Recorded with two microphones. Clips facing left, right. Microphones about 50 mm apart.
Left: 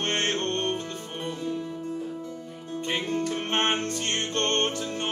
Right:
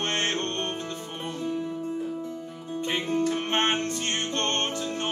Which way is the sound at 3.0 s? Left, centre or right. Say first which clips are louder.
Right 5 dB; right.